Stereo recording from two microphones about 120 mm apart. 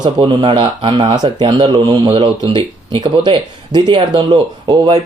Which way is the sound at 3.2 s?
40° right (ahead or behind).